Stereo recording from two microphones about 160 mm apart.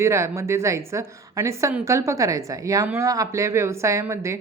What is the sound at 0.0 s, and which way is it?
A woman's voice, 15° right (ahead or behind).